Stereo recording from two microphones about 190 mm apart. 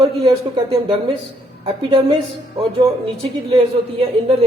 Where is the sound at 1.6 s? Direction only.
30° right (ahead or behind).